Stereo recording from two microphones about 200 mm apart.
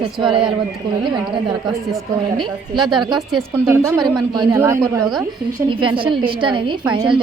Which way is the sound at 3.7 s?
15° right (ahead or behind).